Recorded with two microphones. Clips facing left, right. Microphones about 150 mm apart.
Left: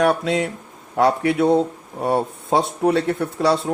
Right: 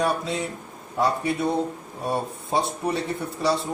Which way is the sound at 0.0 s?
85° left.